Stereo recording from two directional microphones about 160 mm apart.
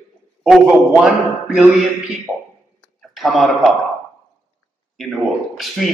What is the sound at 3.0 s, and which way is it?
Speech, centre (ahead or behind).